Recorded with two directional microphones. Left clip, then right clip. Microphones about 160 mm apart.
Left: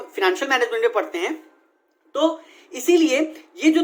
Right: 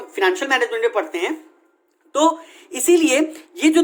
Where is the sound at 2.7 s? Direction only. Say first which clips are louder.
Right 2 dB; 45° right (ahead or behind).